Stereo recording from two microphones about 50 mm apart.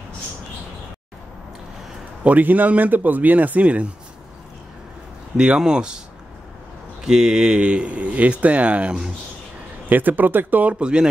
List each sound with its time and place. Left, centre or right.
2.2 s speech: right
5.6 s speech: centre
7.1 s speech: centre
9.8 s speech: right
10.8 s speech: centre